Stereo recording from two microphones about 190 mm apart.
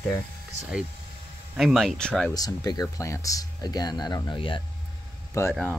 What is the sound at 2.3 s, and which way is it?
Speech, 20° left (ahead or behind).